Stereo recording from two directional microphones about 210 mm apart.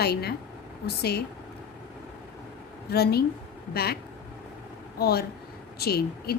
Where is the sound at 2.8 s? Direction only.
50° left (ahead or behind).